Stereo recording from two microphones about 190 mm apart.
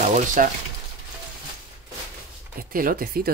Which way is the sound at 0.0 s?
40° right (ahead or behind).